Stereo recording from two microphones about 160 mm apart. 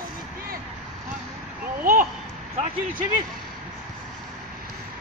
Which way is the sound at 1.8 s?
60° right (ahead or behind).